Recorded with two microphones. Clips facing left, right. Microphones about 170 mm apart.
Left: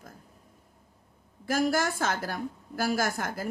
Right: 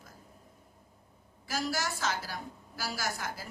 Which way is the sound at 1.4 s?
50° left (ahead or behind).